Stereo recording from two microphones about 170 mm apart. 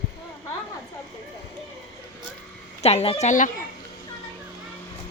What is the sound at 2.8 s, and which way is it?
Speech, 35° left (ahead or behind).